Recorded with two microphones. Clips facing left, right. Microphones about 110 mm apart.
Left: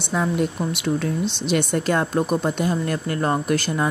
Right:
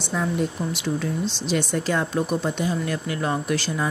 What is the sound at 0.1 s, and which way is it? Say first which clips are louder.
Speech: left 3 dB; 60° left (ahead or behind).